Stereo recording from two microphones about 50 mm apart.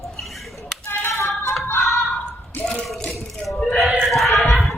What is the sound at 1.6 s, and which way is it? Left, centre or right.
Music, left.